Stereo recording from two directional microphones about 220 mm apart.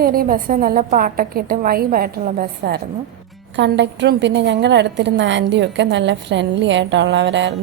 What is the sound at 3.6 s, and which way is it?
A woman's voice, 55° right (ahead or behind).